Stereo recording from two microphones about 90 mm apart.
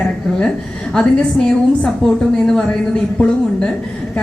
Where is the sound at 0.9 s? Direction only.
10° left (ahead or behind).